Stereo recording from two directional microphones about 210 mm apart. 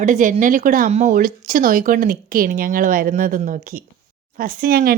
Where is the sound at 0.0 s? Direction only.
35° right (ahead or behind).